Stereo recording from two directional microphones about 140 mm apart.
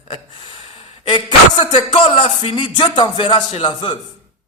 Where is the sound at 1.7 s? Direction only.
45° left (ahead or behind).